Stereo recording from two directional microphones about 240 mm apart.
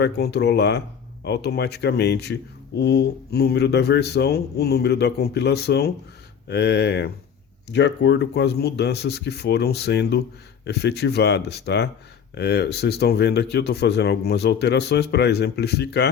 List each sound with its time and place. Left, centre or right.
0.0 s speech: left